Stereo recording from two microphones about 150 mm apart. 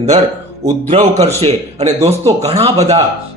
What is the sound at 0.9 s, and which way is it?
Speech, 50° right (ahead or behind).